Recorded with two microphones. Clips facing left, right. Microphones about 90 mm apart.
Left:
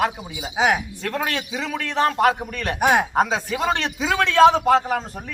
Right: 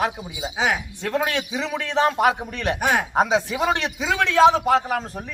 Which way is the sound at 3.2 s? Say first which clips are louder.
Right 1 dB; 20° right (ahead or behind).